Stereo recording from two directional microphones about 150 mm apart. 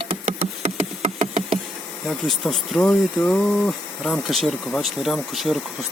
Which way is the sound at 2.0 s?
Centre (ahead or behind).